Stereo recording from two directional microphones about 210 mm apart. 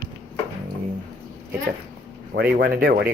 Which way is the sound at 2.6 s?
50° right (ahead or behind).